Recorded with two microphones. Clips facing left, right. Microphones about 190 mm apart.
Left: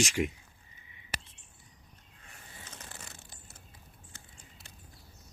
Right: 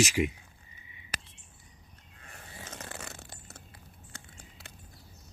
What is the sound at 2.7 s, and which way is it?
Biting, 75° right (ahead or behind).